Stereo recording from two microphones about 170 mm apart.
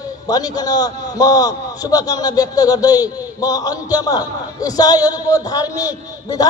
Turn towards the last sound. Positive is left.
turn(degrees=20)  # may be behind; listen again after turning